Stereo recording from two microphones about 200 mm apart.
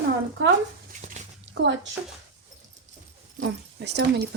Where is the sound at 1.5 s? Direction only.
65° right (ahead or behind).